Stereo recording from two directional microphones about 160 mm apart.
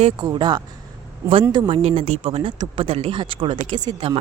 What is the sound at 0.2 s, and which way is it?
Speech, 25° right (ahead or behind).